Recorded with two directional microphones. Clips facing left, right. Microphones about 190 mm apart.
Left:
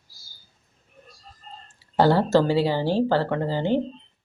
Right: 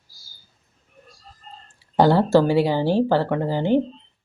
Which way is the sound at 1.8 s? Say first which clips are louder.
Right 2 dB; 15° right (ahead or behind).